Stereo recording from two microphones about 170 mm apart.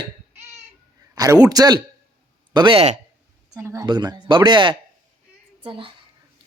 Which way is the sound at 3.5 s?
20° right (ahead or behind).